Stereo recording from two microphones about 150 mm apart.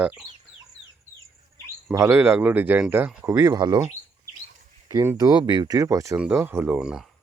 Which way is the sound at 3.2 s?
25° right (ahead or behind).